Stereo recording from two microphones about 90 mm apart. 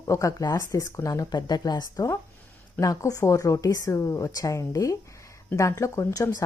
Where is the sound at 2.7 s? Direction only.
40° left (ahead or behind).